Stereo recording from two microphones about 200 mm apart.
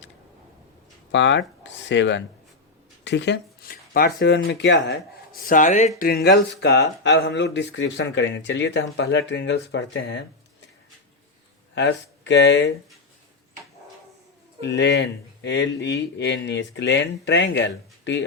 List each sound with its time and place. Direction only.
1.1 s speech: 65° left (ahead or behind)
3.0 s a sound: 60° left (ahead or behind)
4.4 s speech: 55° left (ahead or behind); by 5.9 s 40° left (ahead or behind)
6.0 s speech: 50° left (ahead or behind)
11.7 s speech: 60° left (ahead or behind)
14.6 s speech: 60° left (ahead or behind)